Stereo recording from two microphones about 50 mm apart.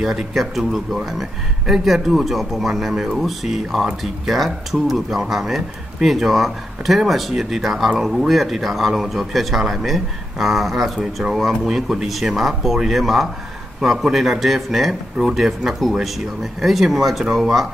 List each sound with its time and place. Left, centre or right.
0.0 s speech: centre